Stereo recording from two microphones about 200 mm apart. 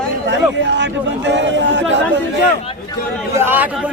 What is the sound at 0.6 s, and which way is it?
Speech, 60° right (ahead or behind).